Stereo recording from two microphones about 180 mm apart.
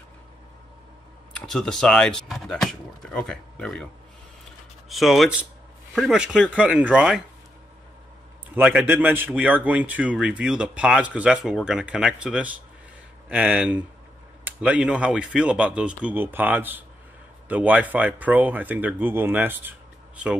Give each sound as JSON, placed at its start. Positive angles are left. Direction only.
{"t": 1.4, "sound": "speech", "side_deg": 0}
{"t": 8.8, "sound": "speech", "side_deg": -10}